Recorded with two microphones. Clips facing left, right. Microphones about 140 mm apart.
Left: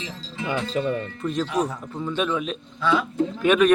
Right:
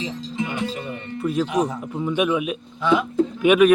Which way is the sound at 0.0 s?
20° right (ahead or behind).